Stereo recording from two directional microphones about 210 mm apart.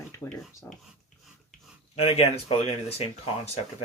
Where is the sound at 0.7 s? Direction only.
10° left (ahead or behind).